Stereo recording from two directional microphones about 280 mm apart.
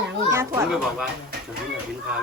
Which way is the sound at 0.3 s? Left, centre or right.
Centre.